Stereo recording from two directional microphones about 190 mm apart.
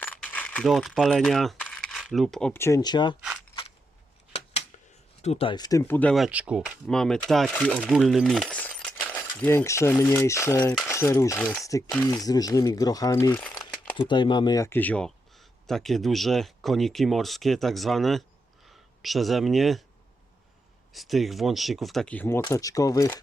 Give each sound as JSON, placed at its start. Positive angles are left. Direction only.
{"t": 0.0, "sound": "coin", "side_deg": 10}
{"t": 2.5, "sound": "speech", "side_deg": 15}
{"t": 5.2, "sound": "speech", "side_deg": 30}
{"t": 13.9, "sound": "speech", "side_deg": 25}
{"t": 20.9, "sound": "speech", "side_deg": 0}